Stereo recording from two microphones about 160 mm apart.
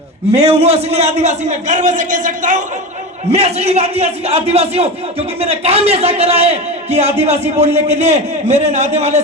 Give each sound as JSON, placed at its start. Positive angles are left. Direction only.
{"t": 0.3, "sound": "a man's voice", "side_deg": -40}
{"t": 3.3, "sound": "a man's voice", "side_deg": -40}